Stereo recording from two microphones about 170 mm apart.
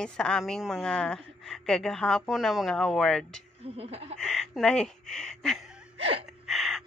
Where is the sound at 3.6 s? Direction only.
35° right (ahead or behind).